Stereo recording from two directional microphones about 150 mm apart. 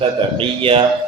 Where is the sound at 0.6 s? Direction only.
35° right (ahead or behind).